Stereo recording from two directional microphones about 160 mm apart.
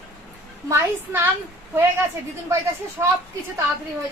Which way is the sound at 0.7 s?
15° right (ahead or behind).